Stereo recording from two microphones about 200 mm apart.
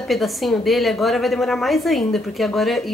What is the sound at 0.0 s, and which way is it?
A woman's voice, centre (ahead or behind).